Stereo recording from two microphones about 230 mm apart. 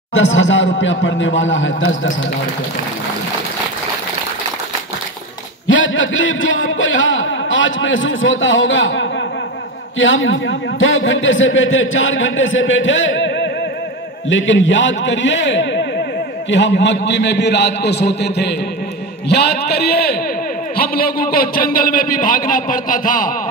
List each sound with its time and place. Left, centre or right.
0.1 s a man's voice: left
5.7 s a man's voice: left